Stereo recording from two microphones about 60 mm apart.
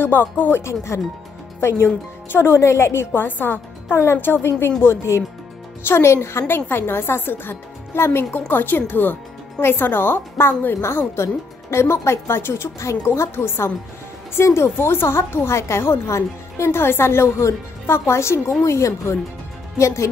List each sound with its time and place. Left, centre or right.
0.0 s speech: left
0.7 s a woman's voice: left
3.1 s a woman's voice: left